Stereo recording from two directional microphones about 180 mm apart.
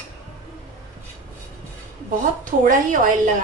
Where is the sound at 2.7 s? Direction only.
45° right (ahead or behind).